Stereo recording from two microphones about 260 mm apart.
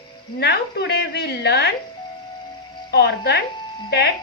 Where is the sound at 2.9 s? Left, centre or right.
Left.